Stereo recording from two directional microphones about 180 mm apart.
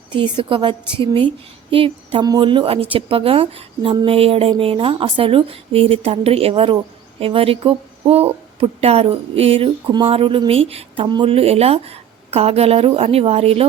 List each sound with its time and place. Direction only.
0.1 s a woman's voice: 25° right (ahead or behind)